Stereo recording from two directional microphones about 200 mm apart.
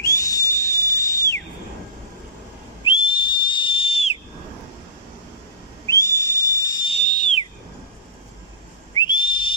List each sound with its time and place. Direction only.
0.0 s whistle: 15° left (ahead or behind)
2.8 s whistle: 25° left (ahead or behind)
5.9 s whistle: 15° left (ahead or behind)
8.9 s whistle: 25° left (ahead or behind)